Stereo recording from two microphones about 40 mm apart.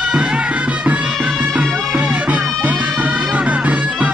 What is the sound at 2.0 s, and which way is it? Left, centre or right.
Music, right.